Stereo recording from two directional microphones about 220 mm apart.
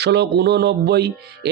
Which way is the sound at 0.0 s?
50° right (ahead or behind).